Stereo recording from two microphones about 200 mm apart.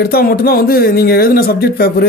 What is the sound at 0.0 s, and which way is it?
Speech, 50° left (ahead or behind).